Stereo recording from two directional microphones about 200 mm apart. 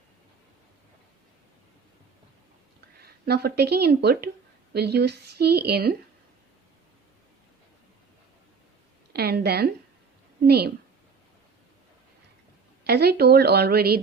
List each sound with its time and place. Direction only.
3.0 s speech: 55° right (ahead or behind)
9.1 s speech: 55° right (ahead or behind)
12.8 s speech: 55° right (ahead or behind)